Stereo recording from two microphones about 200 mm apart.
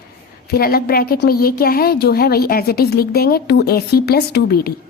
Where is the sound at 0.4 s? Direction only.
50° left (ahead or behind).